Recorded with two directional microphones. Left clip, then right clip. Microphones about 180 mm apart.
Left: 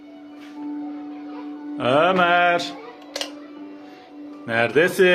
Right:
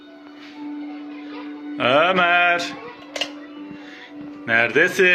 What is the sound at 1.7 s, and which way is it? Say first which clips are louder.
Music: right 1 dB; 5° left (ahead or behind).